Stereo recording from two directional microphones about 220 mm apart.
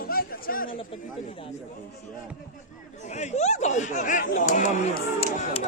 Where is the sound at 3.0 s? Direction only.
30° left (ahead or behind).